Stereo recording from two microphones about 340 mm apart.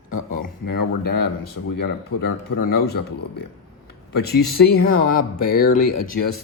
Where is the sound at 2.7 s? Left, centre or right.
Left.